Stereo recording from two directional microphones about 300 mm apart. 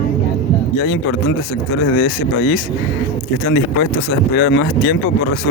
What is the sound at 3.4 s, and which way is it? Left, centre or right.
Speech, left.